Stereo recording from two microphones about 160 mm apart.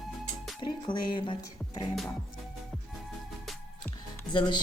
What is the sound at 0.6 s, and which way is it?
Speech, 30° left (ahead or behind).